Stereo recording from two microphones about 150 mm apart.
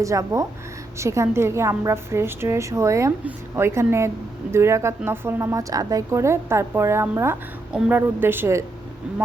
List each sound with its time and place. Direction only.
0.0 s a woman's voice: 20° right (ahead or behind)